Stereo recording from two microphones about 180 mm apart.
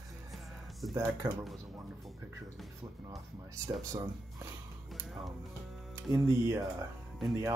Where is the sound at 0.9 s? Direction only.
20° right (ahead or behind).